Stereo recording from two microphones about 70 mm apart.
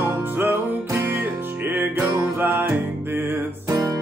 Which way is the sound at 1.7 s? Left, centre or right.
Right.